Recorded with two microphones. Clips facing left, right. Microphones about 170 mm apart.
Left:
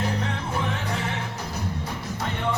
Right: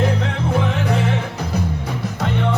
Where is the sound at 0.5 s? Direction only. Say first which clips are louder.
Right 10 dB; 90° right.